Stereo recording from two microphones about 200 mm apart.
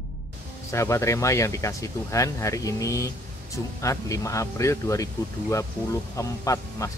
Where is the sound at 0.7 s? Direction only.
15° left (ahead or behind).